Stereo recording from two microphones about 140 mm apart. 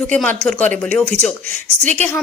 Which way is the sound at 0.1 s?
10° left (ahead or behind).